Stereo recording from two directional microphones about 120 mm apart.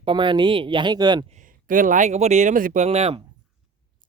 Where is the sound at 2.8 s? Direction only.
60° right (ahead or behind).